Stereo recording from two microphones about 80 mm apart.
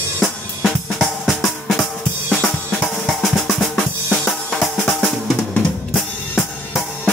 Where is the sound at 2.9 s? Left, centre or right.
Centre.